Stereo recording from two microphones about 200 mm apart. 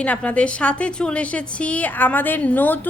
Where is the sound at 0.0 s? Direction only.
5° left (ahead or behind).